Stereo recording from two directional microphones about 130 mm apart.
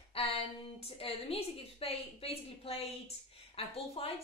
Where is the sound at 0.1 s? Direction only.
50° left (ahead or behind).